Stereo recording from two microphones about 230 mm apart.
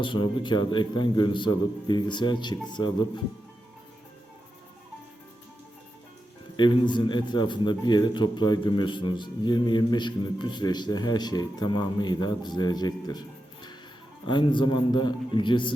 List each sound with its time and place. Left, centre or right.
0.0 s a man's voice: left
6.6 s a man's voice: centre